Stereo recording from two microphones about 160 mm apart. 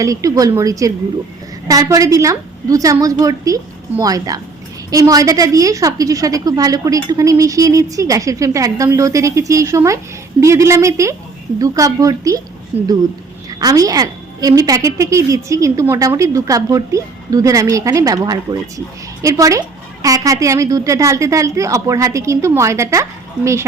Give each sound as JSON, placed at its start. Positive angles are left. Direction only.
{"t": 0.0, "sound": "a woman's voice", "side_deg": -20}
{"t": 12.7, "sound": "speech", "side_deg": -40}
{"t": 13.5, "sound": "a woman's voice", "side_deg": -25}